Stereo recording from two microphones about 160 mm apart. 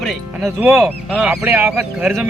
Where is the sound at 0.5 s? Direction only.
15° right (ahead or behind).